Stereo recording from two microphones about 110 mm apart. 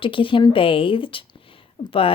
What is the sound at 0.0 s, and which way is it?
Speech, 50° left (ahead or behind).